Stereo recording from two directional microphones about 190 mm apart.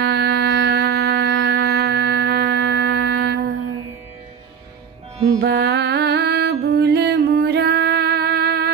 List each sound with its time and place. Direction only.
0.0 s music: 65° right (ahead or behind)
5.4 s music: 65° right (ahead or behind)